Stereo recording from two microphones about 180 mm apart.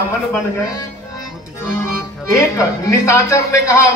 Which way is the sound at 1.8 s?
15° left (ahead or behind).